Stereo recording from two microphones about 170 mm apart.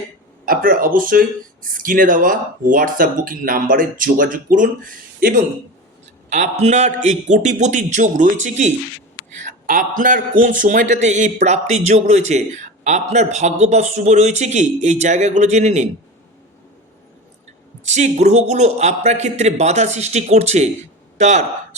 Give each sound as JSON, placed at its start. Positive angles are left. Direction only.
{"t": 0.4, "sound": "speech", "side_deg": -55}
{"t": 6.3, "sound": "a man's voice", "side_deg": -40}
{"t": 17.8, "sound": "a man's voice", "side_deg": -40}